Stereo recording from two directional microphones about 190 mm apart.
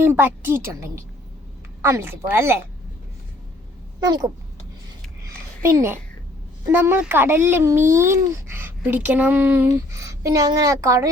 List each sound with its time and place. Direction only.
0.0 s speech: 10° right (ahead or behind)
4.0 s speech: 20° right (ahead or behind)
5.6 s speech: 15° right (ahead or behind)